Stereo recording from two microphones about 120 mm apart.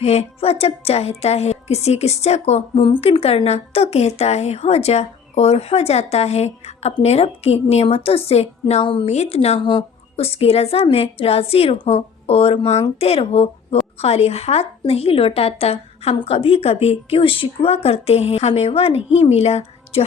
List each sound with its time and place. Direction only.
0.0 s a woman's voice: 60° left (ahead or behind)
2.7 s a woman's voice: 45° left (ahead or behind)
9.0 s a woman's voice: 65° left (ahead or behind)